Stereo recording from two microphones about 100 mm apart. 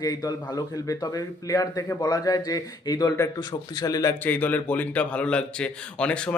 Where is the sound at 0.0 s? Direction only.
40° left (ahead or behind).